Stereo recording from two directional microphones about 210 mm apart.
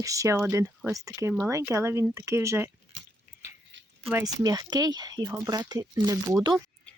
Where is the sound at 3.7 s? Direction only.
60° right (ahead or behind).